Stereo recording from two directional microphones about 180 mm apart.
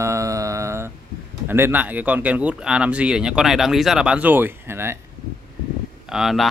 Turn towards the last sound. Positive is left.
turn(degrees=0)  # may be behind; listen again after turning